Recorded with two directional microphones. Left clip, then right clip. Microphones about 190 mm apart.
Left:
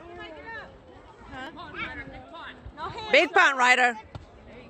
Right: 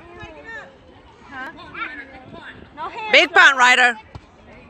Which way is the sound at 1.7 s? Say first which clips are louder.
Right 6 dB; 35° left (ahead or behind).